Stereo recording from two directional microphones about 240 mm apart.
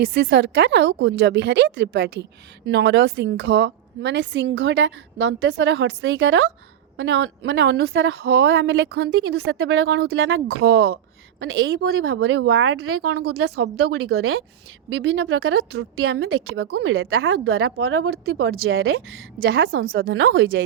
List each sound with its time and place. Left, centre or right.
0.0 s a woman's voice: right
16.5 s a woman's voice: right